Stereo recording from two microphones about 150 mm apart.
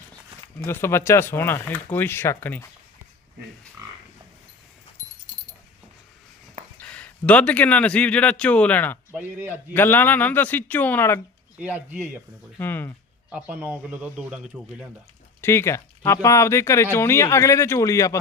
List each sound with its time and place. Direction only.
0.6 s a man's voice: 15° left (ahead or behind)
3.8 s frog: 25° right (ahead or behind)
6.8 s a man's voice: 10° left (ahead or behind)
9.1 s a man's voice: 15° right (ahead or behind)
9.7 s a man's voice: 15° left (ahead or behind)
11.6 s a man's voice: 10° right (ahead or behind)
12.5 s a man's voice: 15° left (ahead or behind)
13.3 s a man's voice: 10° right (ahead or behind)
15.4 s speech: 15° left (ahead or behind)